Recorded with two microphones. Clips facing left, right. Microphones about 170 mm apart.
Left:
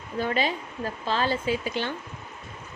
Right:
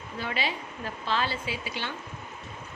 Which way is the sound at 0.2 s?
45° left (ahead or behind).